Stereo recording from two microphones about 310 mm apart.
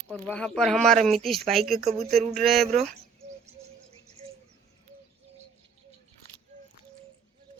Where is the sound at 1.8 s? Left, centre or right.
Right.